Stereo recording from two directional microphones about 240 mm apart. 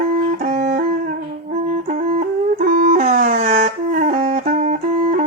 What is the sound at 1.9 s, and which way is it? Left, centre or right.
Music, right.